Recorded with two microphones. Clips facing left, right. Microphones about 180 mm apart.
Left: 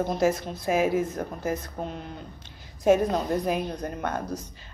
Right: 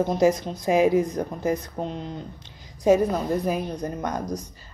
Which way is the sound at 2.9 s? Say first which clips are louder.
Right 4 dB; 10° right (ahead or behind).